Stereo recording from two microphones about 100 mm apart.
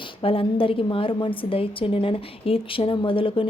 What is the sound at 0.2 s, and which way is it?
A woman's voice, 65° left (ahead or behind).